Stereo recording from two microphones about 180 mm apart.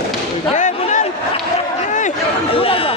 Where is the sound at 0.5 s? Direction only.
40° left (ahead or behind).